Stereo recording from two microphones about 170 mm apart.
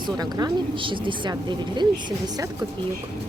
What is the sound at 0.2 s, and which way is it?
A woman's voice, 25° right (ahead or behind).